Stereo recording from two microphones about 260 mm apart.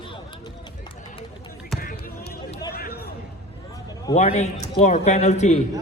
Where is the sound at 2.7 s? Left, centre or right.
Left.